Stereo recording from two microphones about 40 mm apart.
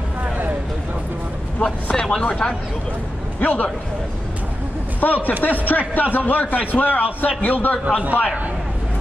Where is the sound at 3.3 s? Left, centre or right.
Left.